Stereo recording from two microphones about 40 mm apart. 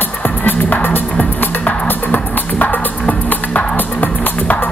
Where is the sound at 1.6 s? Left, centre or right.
Left.